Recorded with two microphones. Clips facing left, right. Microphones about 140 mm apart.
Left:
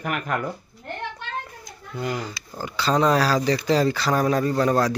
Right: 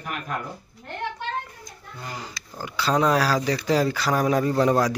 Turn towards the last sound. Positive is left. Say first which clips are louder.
# even
turn(degrees=-15)  # may be behind; listen again after turning